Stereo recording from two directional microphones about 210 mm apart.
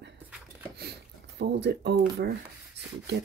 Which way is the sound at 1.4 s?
55° right (ahead or behind).